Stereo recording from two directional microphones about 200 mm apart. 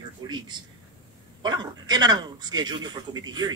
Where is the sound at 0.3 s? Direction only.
20° right (ahead or behind).